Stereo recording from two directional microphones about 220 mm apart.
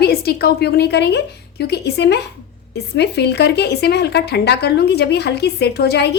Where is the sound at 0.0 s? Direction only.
45° left (ahead or behind).